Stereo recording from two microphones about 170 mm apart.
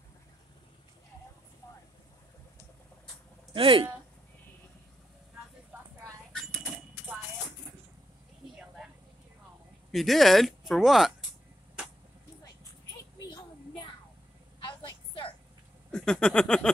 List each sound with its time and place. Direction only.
3.5 s speech: 30° right (ahead or behind)
9.8 s speech: centre (ahead or behind)
14.6 s vehicle: 30° left (ahead or behind)
15.9 s a sound: 5° left (ahead or behind)